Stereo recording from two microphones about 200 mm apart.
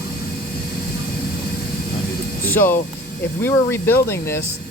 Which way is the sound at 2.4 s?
10° left (ahead or behind).